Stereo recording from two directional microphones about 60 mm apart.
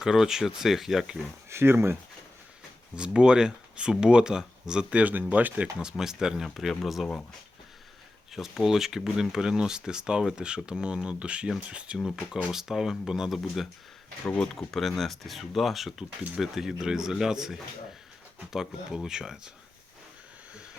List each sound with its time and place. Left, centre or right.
0.0 s speech: centre
1.5 s speech: right
2.9 s speech: centre
5.8 s speech: centre
6.4 s speech: centre
8.3 s speech: centre